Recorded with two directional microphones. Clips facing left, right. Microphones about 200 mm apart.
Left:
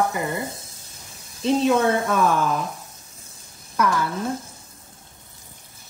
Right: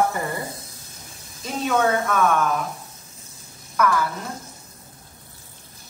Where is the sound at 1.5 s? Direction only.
30° left (ahead or behind).